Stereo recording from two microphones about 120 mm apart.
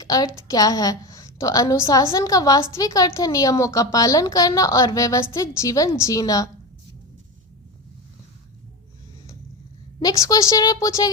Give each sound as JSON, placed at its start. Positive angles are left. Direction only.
{"t": 0.0, "sound": "a woman's voice", "side_deg": 30}
{"t": 10.0, "sound": "a woman's voice", "side_deg": 30}